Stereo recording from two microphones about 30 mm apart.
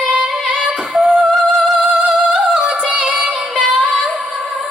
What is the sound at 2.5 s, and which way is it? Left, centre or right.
Music, right.